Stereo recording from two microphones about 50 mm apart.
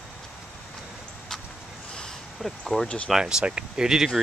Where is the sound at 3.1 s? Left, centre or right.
Centre.